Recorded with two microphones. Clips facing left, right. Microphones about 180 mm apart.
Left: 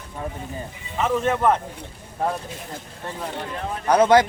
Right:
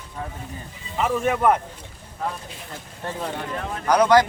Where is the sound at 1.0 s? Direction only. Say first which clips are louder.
Even; 10° right (ahead or behind).